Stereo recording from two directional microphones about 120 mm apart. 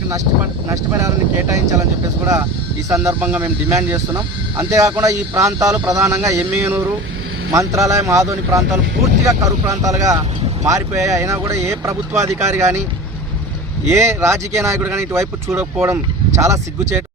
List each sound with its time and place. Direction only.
0.7 s speech: 25° right (ahead or behind)
3.2 s speech: 15° right (ahead or behind)
13.8 s speech: 20° right (ahead or behind)